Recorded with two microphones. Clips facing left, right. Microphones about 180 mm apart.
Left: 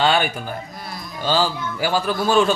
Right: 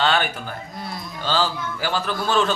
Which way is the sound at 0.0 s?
10° left (ahead or behind).